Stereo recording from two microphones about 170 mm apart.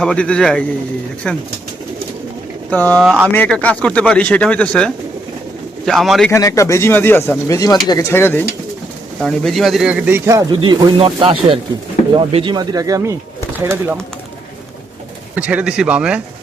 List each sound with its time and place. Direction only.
0.0 s speech: 5° left (ahead or behind)
2.6 s speech: 10° left (ahead or behind)
3.0 s speech: 5° right (ahead or behind)
3.3 s speech: 10° left (ahead or behind)
6.3 s speech: 20° left (ahead or behind)
9.2 s speech: centre (ahead or behind); by 10.4 s 15° right (ahead or behind)
10.6 s speech: 30° right (ahead or behind); by 14.0 s 15° right (ahead or behind)
15.4 s speech: 10° right (ahead or behind)